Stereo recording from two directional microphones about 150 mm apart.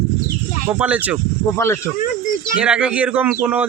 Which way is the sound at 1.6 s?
15° left (ahead or behind).